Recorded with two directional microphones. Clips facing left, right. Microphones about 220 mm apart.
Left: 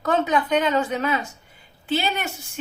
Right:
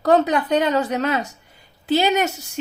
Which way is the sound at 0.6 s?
35° right (ahead or behind).